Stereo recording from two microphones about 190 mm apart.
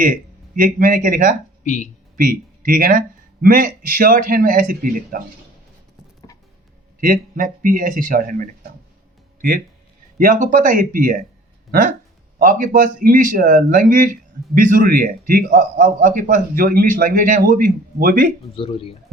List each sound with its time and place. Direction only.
0.0 s speech: 45° right (ahead or behind)
1.6 s speech: 40° left (ahead or behind)
2.1 s a man's voice: 45° right (ahead or behind)
7.0 s a man's voice: 45° right (ahead or behind)
10.2 s a man's voice: 45° right (ahead or behind)
12.4 s a man's voice: 45° right (ahead or behind)
18.5 s speech: 30° left (ahead or behind)